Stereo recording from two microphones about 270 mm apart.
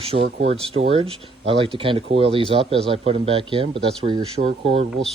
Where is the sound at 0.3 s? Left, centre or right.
Right.